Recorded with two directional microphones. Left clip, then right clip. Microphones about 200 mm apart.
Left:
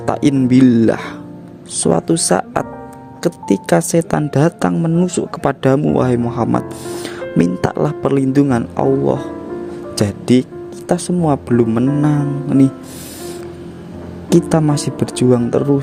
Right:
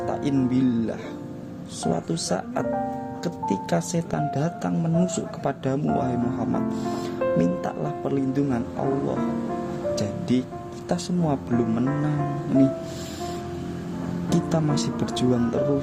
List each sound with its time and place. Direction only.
0.1 s speech: 50° left (ahead or behind)
9.9 s speech: 45° left (ahead or behind)
14.3 s speech: 40° left (ahead or behind)